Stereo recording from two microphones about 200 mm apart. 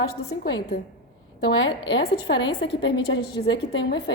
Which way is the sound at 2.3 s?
25° left (ahead or behind).